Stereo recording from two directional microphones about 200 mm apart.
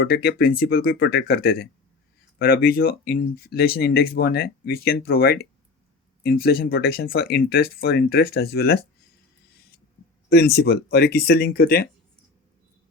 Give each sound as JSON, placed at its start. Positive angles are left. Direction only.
{"t": 0.0, "sound": "speech", "side_deg": 50}
{"t": 10.2, "sound": "speech", "side_deg": 50}